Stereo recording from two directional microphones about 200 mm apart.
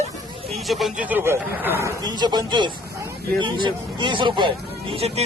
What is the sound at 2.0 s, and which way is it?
A man's voice, 20° right (ahead or behind).